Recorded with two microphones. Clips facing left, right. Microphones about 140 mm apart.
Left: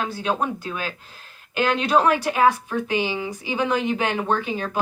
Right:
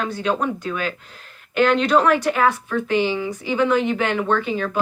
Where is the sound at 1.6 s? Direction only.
10° left (ahead or behind).